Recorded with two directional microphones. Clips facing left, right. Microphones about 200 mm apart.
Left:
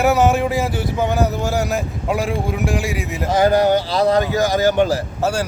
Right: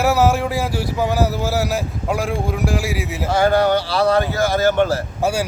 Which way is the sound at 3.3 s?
15° left (ahead or behind).